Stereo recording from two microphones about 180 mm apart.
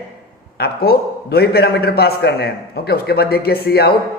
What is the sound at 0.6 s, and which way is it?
Speech, 60° left (ahead or behind).